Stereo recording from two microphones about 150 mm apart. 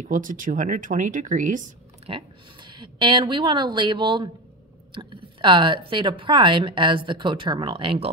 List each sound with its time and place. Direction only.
0.0 s speech: 60° right (ahead or behind)
2.0 s a woman's voice: 35° right (ahead or behind)